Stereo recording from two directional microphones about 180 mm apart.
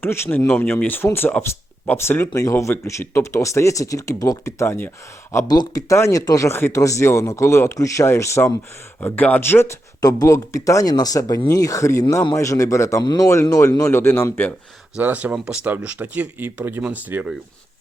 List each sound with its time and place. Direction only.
0.0 s speech: 15° left (ahead or behind)
14.9 s speech: 10° right (ahead or behind)